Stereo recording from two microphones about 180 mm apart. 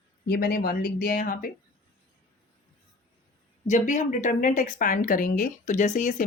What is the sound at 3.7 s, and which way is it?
A woman's voice, 45° left (ahead or behind).